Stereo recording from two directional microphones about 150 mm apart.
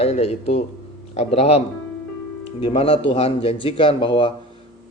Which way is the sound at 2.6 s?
40° left (ahead or behind).